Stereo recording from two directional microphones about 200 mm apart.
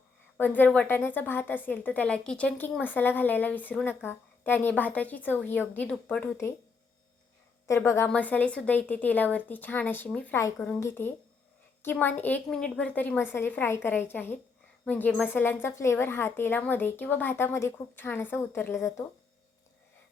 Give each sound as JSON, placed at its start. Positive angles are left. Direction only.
{"t": 0.3, "sound": "a woman's voice", "side_deg": 10}
{"t": 7.7, "sound": "a woman's voice", "side_deg": 15}